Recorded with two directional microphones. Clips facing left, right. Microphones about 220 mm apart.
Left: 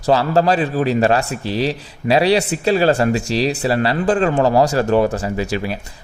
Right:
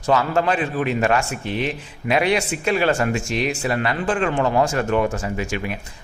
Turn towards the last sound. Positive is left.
turn(degrees=35)  # may be behind; listen again after turning